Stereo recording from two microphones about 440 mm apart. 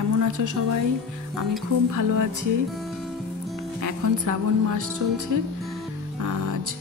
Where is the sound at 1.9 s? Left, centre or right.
Right.